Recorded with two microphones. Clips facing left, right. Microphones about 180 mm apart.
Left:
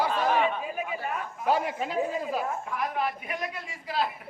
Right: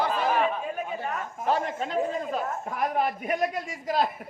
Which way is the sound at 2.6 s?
45° right (ahead or behind).